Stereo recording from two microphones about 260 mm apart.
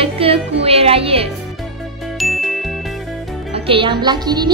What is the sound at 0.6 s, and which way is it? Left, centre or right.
Speech, right.